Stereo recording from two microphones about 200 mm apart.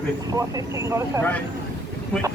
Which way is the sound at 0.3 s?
15° right (ahead or behind).